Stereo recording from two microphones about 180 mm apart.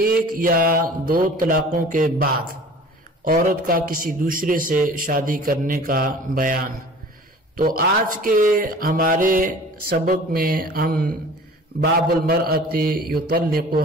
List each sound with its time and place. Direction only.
0.0 s a man's voice: 55° right (ahead or behind)
3.3 s a man's voice: 50° right (ahead or behind)